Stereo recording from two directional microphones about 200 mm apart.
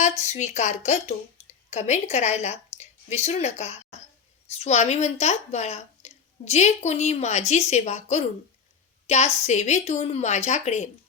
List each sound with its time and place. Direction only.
0.0 s a woman's voice: 35° left (ahead or behind)